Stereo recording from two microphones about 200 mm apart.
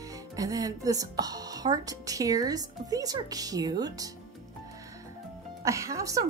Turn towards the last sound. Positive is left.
turn(degrees=-15)  # may be behind; listen again after turning